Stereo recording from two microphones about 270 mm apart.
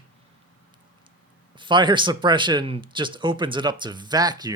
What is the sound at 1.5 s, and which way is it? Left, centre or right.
Speech, centre.